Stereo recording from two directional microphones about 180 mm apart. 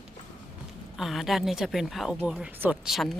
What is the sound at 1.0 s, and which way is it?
Speech, centre (ahead or behind).